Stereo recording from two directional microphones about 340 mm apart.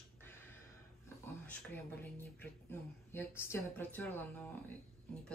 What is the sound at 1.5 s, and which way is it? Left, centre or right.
Speech, centre.